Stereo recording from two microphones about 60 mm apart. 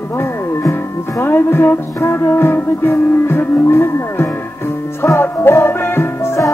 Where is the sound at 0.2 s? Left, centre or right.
Left.